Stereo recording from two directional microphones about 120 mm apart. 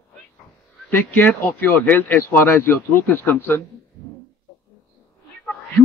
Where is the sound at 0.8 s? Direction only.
15° left (ahead or behind).